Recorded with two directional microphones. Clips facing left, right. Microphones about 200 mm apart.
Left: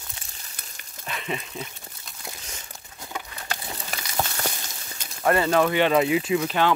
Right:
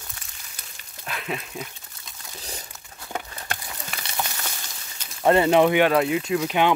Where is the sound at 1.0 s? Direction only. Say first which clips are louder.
Even; centre (ahead or behind).